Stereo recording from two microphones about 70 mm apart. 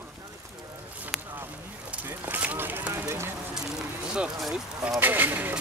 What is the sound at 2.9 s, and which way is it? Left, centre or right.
Speech, right.